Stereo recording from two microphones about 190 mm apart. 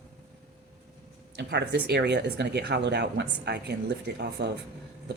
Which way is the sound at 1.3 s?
60° right (ahead or behind).